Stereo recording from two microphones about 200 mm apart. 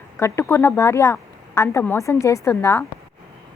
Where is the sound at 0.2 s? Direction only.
15° left (ahead or behind).